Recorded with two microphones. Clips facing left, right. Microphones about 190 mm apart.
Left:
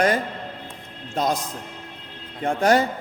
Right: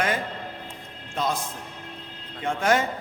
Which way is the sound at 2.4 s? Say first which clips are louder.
Left 4 dB; 40° left (ahead or behind).